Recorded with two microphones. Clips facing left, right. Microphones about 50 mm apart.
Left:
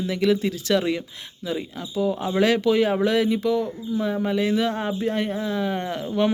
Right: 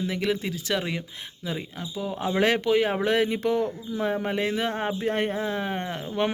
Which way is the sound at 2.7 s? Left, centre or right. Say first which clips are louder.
Left 3 dB; centre.